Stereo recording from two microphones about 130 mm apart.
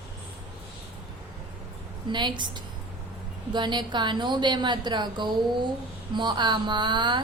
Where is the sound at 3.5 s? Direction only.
35° right (ahead or behind).